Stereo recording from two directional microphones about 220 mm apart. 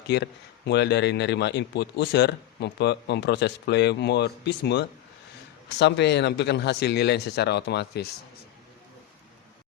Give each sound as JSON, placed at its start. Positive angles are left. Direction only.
{"t": 0.1, "sound": "speech", "side_deg": 50}